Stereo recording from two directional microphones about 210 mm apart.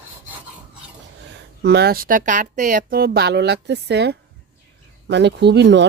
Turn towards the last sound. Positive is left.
turn(degrees=-55)  # may be behind; listen again after turning